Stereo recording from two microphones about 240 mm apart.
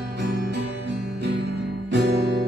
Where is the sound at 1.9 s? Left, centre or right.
Right.